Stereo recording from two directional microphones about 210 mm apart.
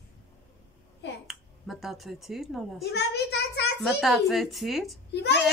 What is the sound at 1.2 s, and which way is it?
Finger snapping, centre (ahead or behind).